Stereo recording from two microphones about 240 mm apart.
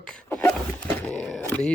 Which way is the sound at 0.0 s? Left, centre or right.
Centre.